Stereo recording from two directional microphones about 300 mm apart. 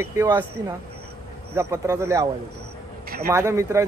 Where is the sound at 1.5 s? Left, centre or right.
Centre.